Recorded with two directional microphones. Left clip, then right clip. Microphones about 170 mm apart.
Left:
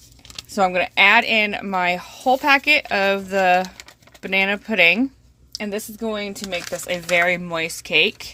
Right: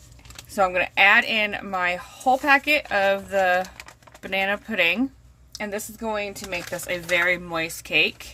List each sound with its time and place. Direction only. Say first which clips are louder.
0.5 s a woman's voice: left 3 dB; 40° left (ahead or behind)